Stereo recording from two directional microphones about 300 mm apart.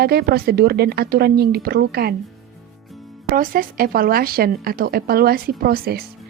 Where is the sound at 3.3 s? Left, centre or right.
Right.